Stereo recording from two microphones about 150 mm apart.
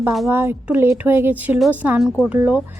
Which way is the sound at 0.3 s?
15° right (ahead or behind).